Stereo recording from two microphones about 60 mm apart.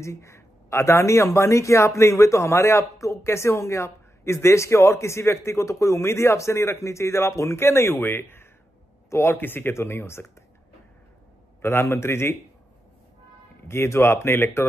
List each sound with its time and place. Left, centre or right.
0.0 s speech: left
9.4 s speech: left
11.6 s speech: left
13.7 s speech: left